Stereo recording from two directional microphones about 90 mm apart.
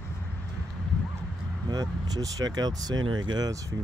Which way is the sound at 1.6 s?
45° right (ahead or behind).